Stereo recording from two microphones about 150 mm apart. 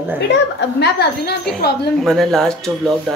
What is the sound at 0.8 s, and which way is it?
Speech, 90° left.